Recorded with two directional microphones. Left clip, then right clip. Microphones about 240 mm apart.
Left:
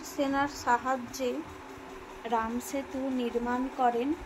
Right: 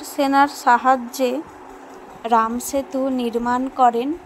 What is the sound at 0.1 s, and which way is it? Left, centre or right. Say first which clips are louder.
A woman's voice: right 13 dB; right.